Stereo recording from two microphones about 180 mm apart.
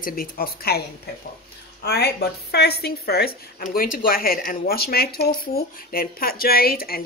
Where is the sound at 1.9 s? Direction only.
65° left (ahead or behind).